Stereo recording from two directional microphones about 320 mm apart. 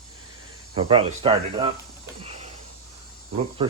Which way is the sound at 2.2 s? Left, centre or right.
Centre.